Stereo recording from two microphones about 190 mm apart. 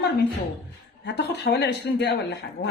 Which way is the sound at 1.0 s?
65° left (ahead or behind).